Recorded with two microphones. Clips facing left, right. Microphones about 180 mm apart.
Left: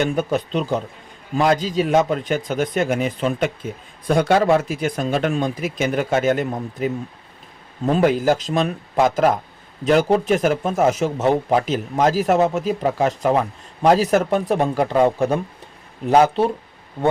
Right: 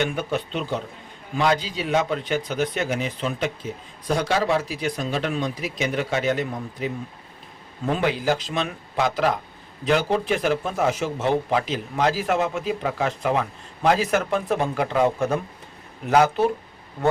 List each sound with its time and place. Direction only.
0.0 s speech: 40° left (ahead or behind)
7.9 s speech: 45° left (ahead or behind); by 16.5 s 30° left (ahead or behind)